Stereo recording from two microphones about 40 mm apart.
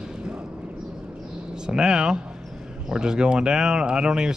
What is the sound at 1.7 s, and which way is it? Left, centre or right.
Speech, centre.